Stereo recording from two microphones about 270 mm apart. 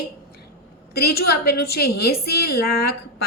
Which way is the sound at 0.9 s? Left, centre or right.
Left.